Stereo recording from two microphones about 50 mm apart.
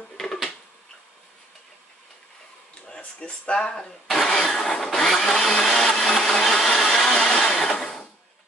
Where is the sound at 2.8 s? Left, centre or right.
Left.